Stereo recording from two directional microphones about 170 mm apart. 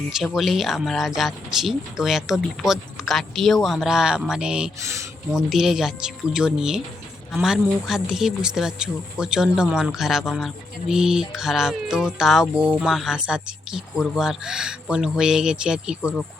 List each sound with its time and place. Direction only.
0.1 s speech: centre (ahead or behind)
4.8 s speech: 15° right (ahead or behind)
5.3 s speech: centre (ahead or behind)